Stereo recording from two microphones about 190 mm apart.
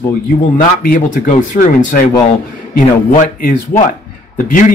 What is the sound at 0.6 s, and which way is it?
Speech, 45° left (ahead or behind).